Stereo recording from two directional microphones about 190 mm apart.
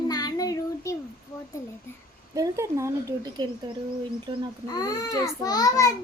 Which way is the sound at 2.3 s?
15° right (ahead or behind).